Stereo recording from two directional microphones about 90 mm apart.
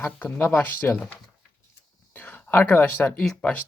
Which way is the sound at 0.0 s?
20° left (ahead or behind).